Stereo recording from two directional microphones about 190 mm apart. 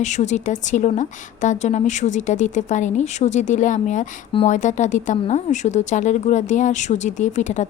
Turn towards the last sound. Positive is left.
turn(degrees=40)  # may be behind; listen again after turning